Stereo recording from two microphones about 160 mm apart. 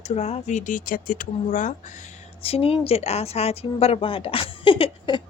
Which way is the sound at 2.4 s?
40° left (ahead or behind).